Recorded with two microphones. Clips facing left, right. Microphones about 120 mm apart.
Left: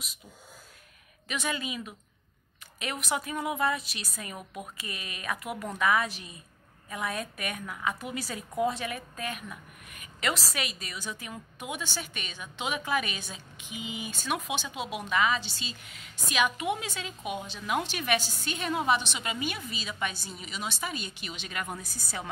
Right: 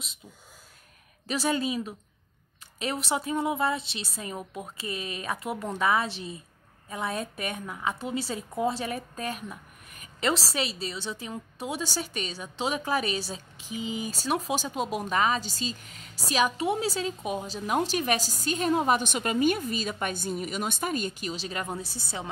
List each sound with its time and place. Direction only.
1.2 s a woman's voice: 35° right (ahead or behind)